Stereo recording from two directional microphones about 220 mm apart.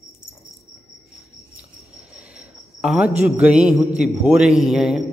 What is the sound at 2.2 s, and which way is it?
A man's voice, 5° right (ahead or behind).